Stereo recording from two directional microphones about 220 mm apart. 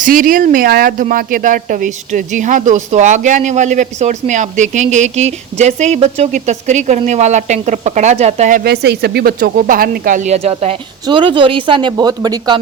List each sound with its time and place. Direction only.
0.0 s speech: 40° right (ahead or behind); by 12.5 s 15° right (ahead or behind)